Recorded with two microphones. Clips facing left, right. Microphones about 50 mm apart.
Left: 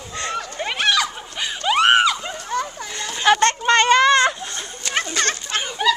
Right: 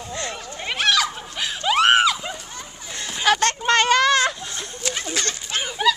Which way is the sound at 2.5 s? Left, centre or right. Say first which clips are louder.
Left 13 dB; left.